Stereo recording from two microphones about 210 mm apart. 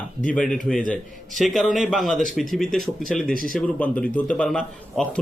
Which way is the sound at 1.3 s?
Centre (ahead or behind).